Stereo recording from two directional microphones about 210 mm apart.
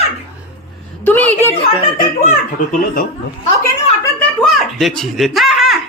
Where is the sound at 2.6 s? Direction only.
40° left (ahead or behind).